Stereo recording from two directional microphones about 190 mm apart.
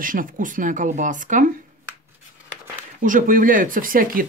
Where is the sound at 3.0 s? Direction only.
45° right (ahead or behind).